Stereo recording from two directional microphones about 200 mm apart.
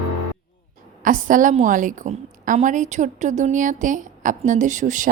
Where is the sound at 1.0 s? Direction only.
40° right (ahead or behind).